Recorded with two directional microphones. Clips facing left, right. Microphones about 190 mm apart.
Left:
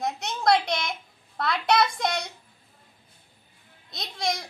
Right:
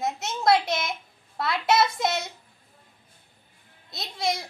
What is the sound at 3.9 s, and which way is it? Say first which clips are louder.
Speech: right 1 dB; 5° right (ahead or behind).